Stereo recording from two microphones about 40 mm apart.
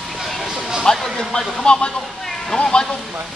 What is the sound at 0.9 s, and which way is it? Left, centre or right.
Speech, centre.